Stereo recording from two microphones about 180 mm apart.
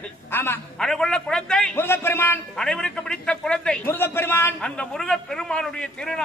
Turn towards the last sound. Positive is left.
turn(degrees=5)  # may be behind; listen again after turning